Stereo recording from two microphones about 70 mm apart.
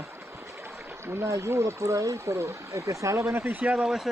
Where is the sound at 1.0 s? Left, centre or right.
Right.